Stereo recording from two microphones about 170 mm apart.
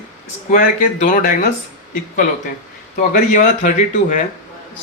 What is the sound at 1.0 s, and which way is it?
Speech, 55° left (ahead or behind).